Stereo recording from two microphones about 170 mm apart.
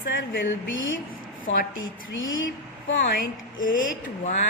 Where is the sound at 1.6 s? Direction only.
90° left; by 4.3 s 50° left (ahead or behind).